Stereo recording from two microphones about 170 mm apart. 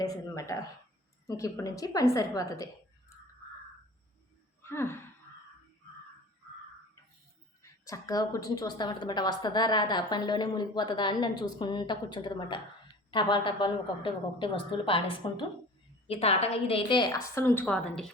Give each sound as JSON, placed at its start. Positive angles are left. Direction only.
{"t": 0.0, "sound": "a sound", "side_deg": 20}
{"t": 1.3, "sound": "a woman's voice", "side_deg": 20}
{"t": 3.1, "sound": "crow", "side_deg": 15}
{"t": 4.6, "sound": "speech", "side_deg": 15}
{"t": 7.6, "sound": "a woman's voice", "side_deg": 20}